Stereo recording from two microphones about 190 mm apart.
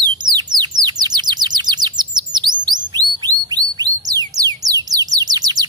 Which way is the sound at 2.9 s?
20° right (ahead or behind).